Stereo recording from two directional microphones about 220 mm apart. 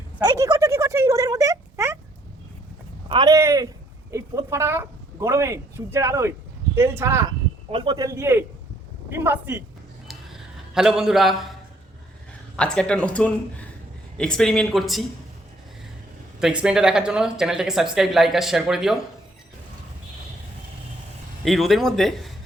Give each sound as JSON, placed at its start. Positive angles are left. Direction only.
{"t": 0.2, "sound": "a sound", "side_deg": -20}
{"t": 3.1, "sound": "a man's voice", "side_deg": -15}
{"t": 10.8, "sound": "speech", "side_deg": 0}
{"t": 12.5, "sound": "speech", "side_deg": 5}
{"t": 16.4, "sound": "speech", "side_deg": -5}
{"t": 21.4, "sound": "speech", "side_deg": 0}